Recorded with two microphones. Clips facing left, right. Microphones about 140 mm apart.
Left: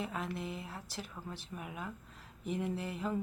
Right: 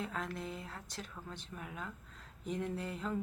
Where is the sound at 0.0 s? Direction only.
5° left (ahead or behind).